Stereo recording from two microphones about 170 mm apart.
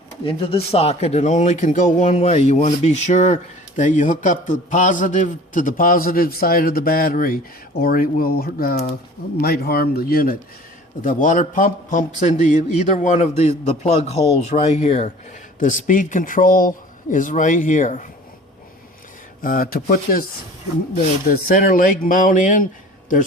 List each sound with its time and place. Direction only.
0.3 s a man's voice: 35° left (ahead or behind); by 10.3 s 60° left (ahead or behind)
11.0 s a man's voice: 50° left (ahead or behind)
19.4 s speech: 55° left (ahead or behind)